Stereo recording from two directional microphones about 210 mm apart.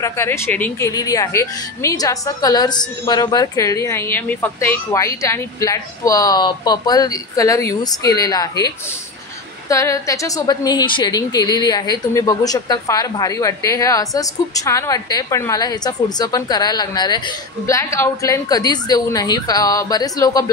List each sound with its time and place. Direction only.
0.0 s a woman's voice: 10° left (ahead or behind)